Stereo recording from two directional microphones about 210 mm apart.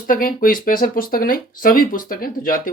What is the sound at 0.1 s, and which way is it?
Speech, 45° left (ahead or behind).